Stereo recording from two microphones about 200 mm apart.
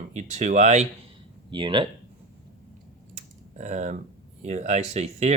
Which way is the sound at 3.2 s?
35° right (ahead or behind).